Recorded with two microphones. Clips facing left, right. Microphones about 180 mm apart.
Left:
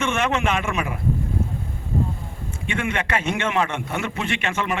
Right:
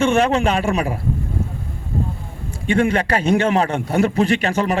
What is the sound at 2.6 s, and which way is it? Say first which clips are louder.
A man's voice: right 9 dB; 35° right (ahead or behind).